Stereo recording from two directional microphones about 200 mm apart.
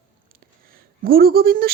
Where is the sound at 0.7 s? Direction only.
50° right (ahead or behind).